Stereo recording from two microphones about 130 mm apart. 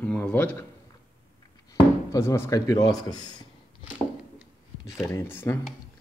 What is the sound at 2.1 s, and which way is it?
Speech, 20° left (ahead or behind).